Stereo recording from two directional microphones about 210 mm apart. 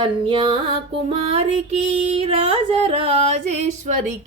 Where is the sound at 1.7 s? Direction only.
30° right (ahead or behind).